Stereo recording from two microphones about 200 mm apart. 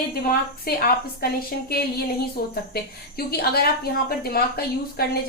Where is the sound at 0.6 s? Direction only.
50° left (ahead or behind).